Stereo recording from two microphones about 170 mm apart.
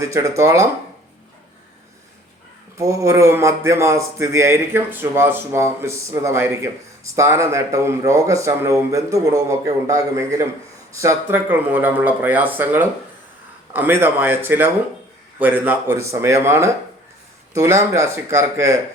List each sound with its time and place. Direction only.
0.0 s speech: 20° right (ahead or behind)
2.7 s a man's voice: 20° right (ahead or behind)